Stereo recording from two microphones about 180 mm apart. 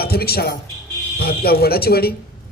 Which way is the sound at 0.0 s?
60° left (ahead or behind).